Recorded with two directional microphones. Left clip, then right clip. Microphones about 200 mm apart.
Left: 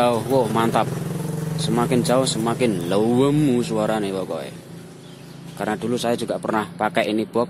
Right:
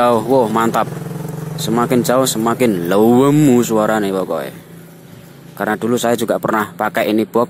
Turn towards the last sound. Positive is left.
turn(degrees=-25)  # may be behind; listen again after turning